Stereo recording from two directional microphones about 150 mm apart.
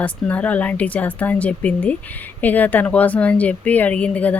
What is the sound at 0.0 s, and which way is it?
A woman's voice, 10° left (ahead or behind).